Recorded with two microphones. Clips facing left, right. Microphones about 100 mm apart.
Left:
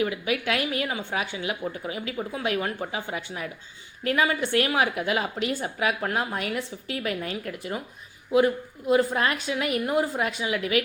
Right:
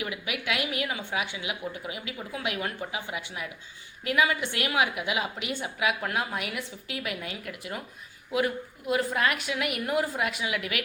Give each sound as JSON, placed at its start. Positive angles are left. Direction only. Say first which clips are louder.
{"t": 0.0, "sound": "a woman's voice", "louder": "left 7 dB", "side_deg": 35}